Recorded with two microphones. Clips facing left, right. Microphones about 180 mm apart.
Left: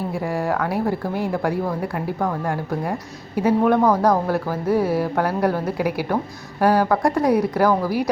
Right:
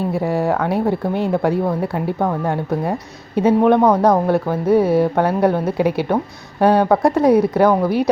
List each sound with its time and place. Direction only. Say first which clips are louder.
0.1 s speech: right 5 dB; 20° right (ahead or behind)